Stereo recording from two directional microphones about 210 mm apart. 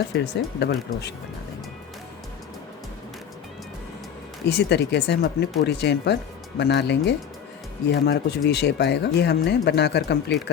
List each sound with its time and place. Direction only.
0.1 s speech: 55° left (ahead or behind)
4.4 s speech: 55° left (ahead or behind)